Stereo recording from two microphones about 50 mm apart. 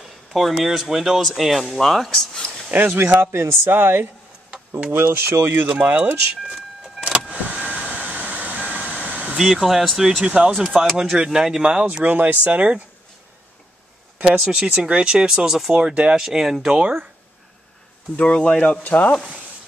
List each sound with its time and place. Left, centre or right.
0.3 s speech: centre
2.3 s a sound: centre
2.9 s speech: right
7.2 s vehicle: right
9.4 s speech: centre
10.2 s speech: right
11.1 s speech: centre
14.4 s speech: centre
15.2 s speech: centre
15.7 s speech: right
16.2 s speech: centre
16.8 s speech: right
18.1 s speech: left
18.8 s speech: left